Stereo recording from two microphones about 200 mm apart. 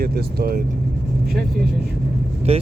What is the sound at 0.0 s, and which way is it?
Speech, 50° right (ahead or behind).